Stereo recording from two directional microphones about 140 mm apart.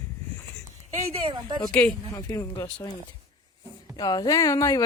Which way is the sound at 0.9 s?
45° right (ahead or behind).